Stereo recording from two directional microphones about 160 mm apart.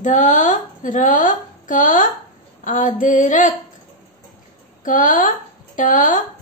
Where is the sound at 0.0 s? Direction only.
50° left (ahead or behind).